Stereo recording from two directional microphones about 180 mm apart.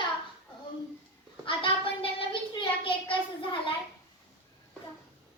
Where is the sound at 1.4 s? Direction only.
30° left (ahead or behind).